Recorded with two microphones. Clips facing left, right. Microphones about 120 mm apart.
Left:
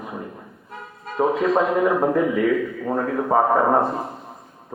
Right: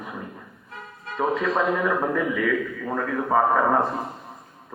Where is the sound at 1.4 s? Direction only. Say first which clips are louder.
Left 5 dB; 30° left (ahead or behind).